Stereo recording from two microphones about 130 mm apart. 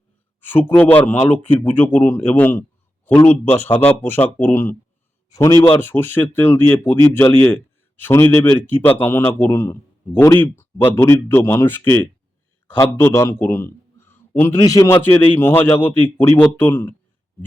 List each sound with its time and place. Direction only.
0.4 s a man's voice: 15° left (ahead or behind)
5.3 s a man's voice: 25° left (ahead or behind)
5.6 s a man's voice: 15° left (ahead or behind)
14.6 s a man's voice: 30° left (ahead or behind)
15.3 s a man's voice: 15° left (ahead or behind)